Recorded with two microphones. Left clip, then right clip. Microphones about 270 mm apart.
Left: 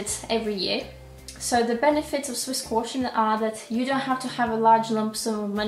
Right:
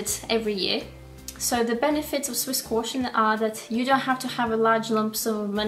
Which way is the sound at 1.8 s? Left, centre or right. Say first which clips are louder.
Left 2 dB; right.